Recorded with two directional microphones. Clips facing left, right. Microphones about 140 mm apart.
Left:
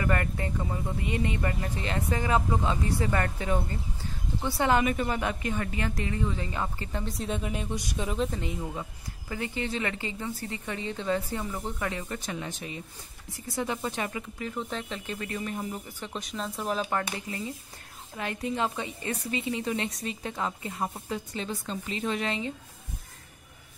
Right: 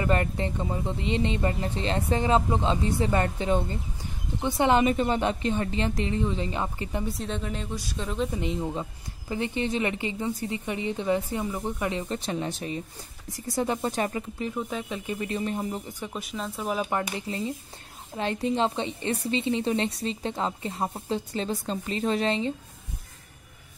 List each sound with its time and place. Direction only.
0.0 s speech: 25° right (ahead or behind)
7.2 s speech: 10° left (ahead or behind)
8.3 s speech: 20° right (ahead or behind); by 14.2 s 35° right (ahead or behind)
14.5 s speech: 10° right (ahead or behind); by 15.8 s 30° right (ahead or behind)
15.9 s speech: 10° right (ahead or behind)
16.9 s speech: 25° right (ahead or behind)